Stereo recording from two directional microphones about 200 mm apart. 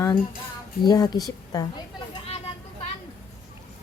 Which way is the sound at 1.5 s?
20° left (ahead or behind).